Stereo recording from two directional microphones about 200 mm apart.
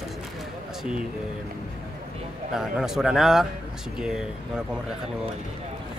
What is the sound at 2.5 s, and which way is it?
Speech, centre (ahead or behind).